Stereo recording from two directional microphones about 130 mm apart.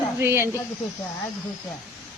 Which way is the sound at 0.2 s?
20° right (ahead or behind).